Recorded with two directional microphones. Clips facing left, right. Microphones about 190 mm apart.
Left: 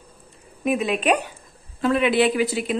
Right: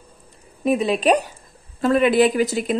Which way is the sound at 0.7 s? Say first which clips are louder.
Right 3 dB; 35° right (ahead or behind).